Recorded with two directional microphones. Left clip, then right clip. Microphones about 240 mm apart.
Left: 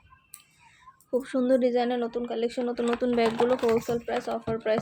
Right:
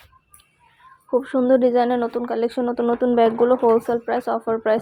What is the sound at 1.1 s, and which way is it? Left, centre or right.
Speech, centre.